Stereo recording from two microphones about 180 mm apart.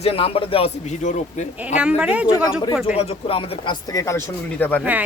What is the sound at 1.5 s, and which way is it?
Speech, 5° right (ahead or behind).